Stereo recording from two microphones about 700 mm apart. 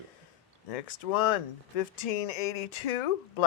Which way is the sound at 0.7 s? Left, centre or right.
Left.